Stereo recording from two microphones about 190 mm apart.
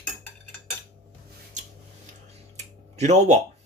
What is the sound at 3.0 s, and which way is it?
Speech, 40° right (ahead or behind).